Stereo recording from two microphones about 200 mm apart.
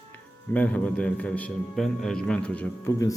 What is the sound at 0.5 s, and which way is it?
A man's voice, 5° left (ahead or behind).